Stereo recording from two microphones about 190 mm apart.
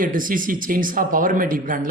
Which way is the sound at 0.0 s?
45° right (ahead or behind).